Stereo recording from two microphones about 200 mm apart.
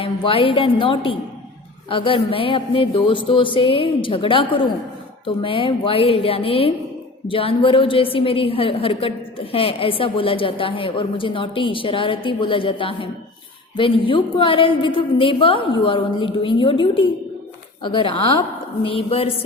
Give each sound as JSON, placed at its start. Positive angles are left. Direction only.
{"t": 0.0, "sound": "a woman's voice", "side_deg": 25}